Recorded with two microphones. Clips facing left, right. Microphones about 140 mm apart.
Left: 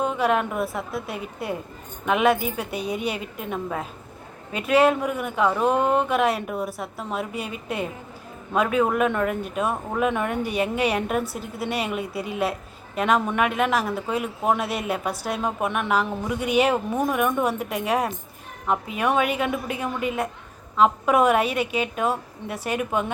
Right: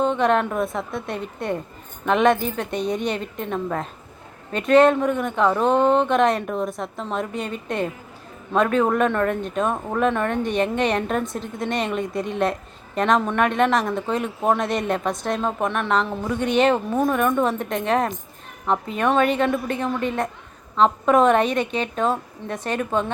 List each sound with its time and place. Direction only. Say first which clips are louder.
0.0 s a woman's voice: right 3 dB; 5° left (ahead or behind)